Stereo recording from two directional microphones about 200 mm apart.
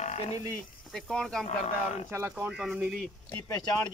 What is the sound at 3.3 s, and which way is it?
Speech, 10° left (ahead or behind).